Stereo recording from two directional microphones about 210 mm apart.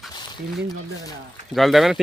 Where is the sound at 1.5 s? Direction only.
Centre (ahead or behind).